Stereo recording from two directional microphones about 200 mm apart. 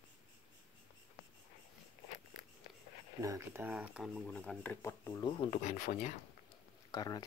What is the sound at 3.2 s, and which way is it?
Speech, 15° right (ahead or behind).